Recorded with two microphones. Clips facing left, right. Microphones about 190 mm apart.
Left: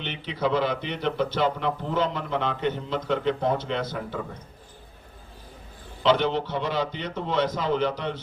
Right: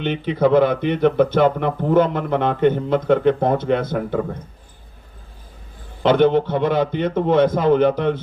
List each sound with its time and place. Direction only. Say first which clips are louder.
0.0 s a man's voice: right 10 dB; 55° right (ahead or behind)
6.0 s a man's voice: right 8 dB; 55° right (ahead or behind)